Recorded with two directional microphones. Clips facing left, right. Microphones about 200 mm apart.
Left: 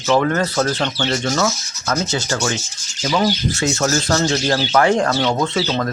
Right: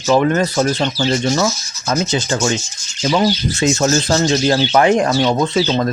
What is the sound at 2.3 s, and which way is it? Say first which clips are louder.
Speech: right 4 dB; 30° right (ahead or behind).